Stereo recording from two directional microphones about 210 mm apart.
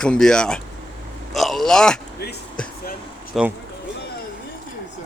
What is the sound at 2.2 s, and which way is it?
Speech, 50° left (ahead or behind).